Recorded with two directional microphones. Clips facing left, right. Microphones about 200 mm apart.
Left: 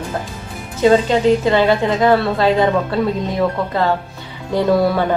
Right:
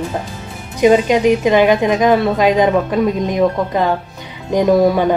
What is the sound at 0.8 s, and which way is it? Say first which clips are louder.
A woman's voice: right 2 dB; 15° right (ahead or behind).